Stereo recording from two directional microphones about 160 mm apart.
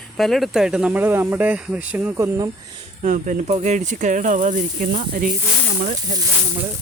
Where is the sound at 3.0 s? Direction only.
50° right (ahead or behind).